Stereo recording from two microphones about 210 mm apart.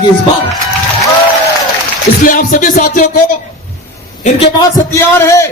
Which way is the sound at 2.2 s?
40° left (ahead or behind).